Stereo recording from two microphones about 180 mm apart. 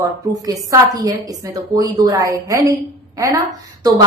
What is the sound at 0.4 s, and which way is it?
A woman's voice, 20° right (ahead or behind).